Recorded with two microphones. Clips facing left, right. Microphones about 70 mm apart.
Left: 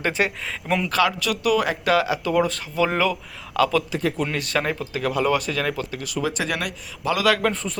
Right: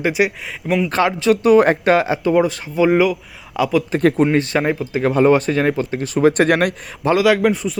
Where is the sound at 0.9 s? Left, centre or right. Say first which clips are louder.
Right 7 dB; right; by 3.8 s centre.